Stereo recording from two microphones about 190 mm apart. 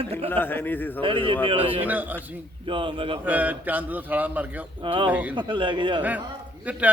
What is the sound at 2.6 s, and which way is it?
Speech, 25° right (ahead or behind).